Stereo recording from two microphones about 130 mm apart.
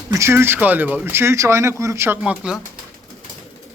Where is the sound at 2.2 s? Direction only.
5° right (ahead or behind).